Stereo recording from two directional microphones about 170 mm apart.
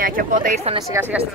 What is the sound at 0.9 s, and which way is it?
Speech, 10° right (ahead or behind).